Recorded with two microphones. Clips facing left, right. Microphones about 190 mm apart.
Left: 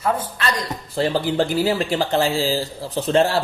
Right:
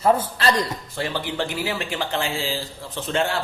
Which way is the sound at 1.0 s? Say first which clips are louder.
Left 7 dB; 35° left (ahead or behind).